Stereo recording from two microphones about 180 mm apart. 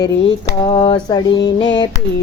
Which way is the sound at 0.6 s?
25° left (ahead or behind).